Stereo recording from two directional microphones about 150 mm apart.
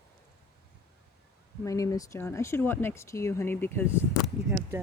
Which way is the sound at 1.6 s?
20° left (ahead or behind).